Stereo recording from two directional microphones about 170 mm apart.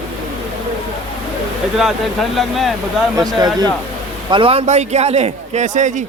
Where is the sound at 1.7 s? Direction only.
Centre (ahead or behind).